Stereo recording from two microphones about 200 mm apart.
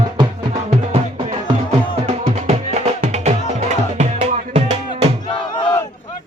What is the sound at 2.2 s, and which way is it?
Music, 35° right (ahead or behind).